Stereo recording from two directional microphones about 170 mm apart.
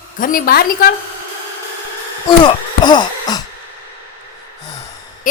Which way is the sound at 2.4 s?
25° left (ahead or behind).